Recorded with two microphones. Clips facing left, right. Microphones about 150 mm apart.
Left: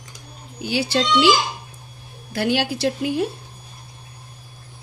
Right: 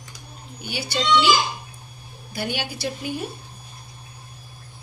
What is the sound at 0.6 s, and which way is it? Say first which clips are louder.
Speech: left 6 dB; 80° left.